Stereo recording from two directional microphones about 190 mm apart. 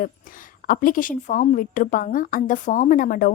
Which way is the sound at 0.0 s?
45° left (ahead or behind).